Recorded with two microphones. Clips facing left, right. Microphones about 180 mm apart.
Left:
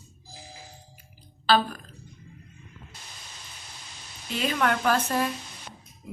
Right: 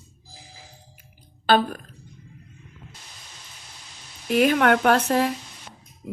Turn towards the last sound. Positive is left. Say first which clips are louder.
# right 5 dB
turn(degrees=-60)  # may be behind; listen again after turning